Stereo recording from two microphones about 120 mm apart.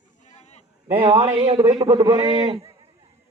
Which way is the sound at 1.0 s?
45° right (ahead or behind).